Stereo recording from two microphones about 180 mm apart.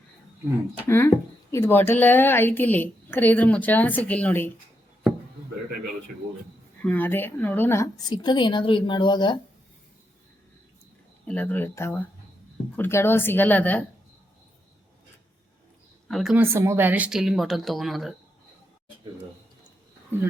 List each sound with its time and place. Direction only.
0.9 s a woman's voice: 15° left (ahead or behind)
6.8 s a woman's voice: 10° left (ahead or behind)
11.3 s a woman's voice: 10° left (ahead or behind)
16.0 s speech: centre (ahead or behind)
16.4 s speech: 15° right (ahead or behind)